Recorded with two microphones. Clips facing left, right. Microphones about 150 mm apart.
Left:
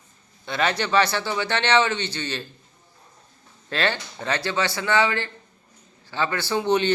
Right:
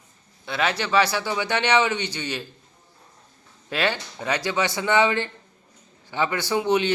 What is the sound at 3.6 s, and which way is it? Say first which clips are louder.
A man's voice: even; 10° right (ahead or behind).